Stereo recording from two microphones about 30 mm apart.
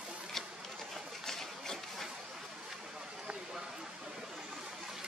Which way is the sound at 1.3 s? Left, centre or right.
Centre.